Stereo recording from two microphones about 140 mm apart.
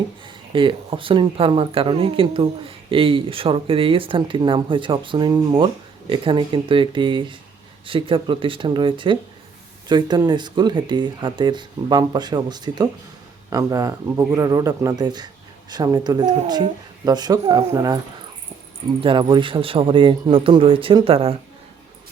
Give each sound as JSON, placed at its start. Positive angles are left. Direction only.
{"t": 0.5, "sound": "speech", "side_deg": -40}
{"t": 19.0, "sound": "speech", "side_deg": -35}